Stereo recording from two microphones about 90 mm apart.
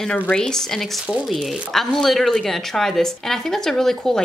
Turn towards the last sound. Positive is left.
turn(degrees=5)  # may be behind; listen again after turning